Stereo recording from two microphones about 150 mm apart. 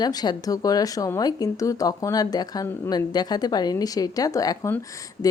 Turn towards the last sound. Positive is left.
turn(degrees=25)  # may be behind; listen again after turning